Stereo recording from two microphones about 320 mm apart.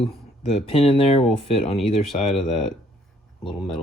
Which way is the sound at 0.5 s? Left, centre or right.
Centre.